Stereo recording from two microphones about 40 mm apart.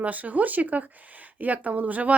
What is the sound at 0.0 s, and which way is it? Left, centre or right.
A woman's voice, right.